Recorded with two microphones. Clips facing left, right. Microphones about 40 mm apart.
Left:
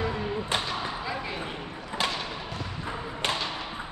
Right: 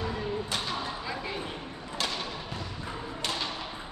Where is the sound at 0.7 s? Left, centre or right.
Centre.